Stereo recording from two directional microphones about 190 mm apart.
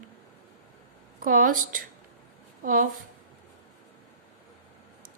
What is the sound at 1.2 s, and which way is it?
A woman's voice, 45° right (ahead or behind).